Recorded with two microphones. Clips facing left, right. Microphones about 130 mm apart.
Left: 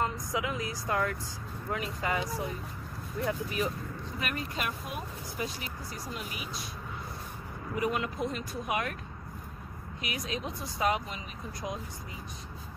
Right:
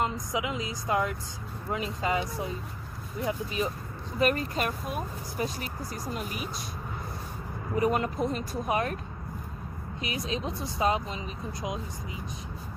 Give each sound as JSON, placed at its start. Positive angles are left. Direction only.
{"t": 0.0, "sound": "a woman's voice", "side_deg": -20}
{"t": 4.2, "sound": "speech", "side_deg": -40}
{"t": 7.7, "sound": "speech", "side_deg": -40}
{"t": 10.0, "sound": "speech", "side_deg": -30}